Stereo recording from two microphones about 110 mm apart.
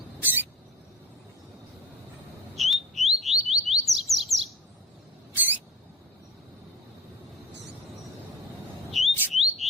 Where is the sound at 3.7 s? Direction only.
Centre (ahead or behind).